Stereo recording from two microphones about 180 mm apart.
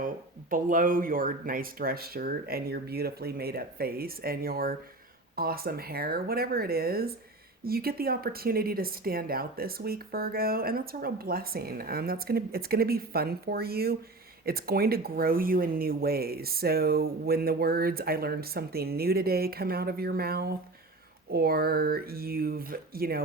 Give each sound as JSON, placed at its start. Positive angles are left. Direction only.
{"t": 0.5, "sound": "a woman's voice", "side_deg": -50}